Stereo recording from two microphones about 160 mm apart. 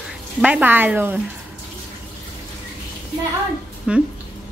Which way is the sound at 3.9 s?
5° right (ahead or behind).